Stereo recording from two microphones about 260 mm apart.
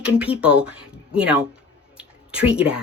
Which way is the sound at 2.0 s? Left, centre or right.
Centre.